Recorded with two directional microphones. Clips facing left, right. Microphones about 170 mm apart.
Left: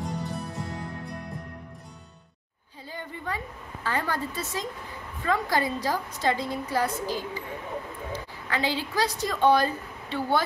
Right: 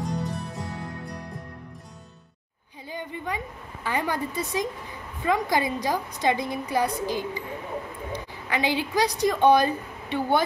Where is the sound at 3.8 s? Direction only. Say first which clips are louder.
Right 2 dB; 15° right (ahead or behind).